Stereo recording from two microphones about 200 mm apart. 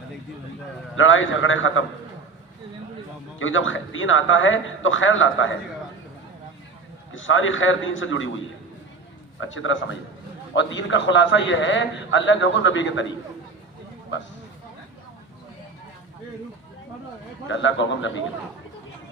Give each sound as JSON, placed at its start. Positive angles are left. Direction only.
{"t": 0.9, "sound": "a man's voice", "side_deg": 75}
{"t": 3.3, "sound": "a man's voice", "side_deg": 75}
{"t": 7.1, "sound": "a man's voice", "side_deg": 75}
{"t": 9.4, "sound": "a man's voice", "side_deg": 75}
{"t": 17.5, "sound": "a man's voice", "side_deg": 65}